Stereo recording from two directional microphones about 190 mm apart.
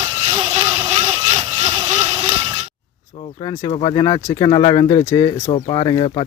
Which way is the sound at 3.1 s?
30° left (ahead or behind).